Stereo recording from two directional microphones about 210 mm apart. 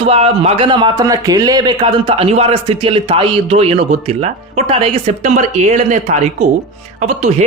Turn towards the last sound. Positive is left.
turn(degrees=-35)  # may be behind; listen again after turning